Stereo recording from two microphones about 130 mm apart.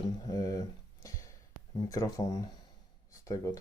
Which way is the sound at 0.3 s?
30° left (ahead or behind).